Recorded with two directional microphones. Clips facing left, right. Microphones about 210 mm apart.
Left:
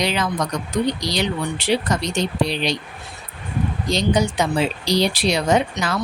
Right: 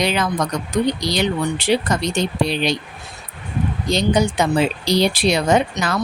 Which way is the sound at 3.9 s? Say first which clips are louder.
Right 2 dB; 55° right (ahead or behind).